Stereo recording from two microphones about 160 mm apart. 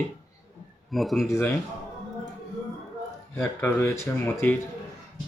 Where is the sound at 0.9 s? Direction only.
Centre (ahead or behind).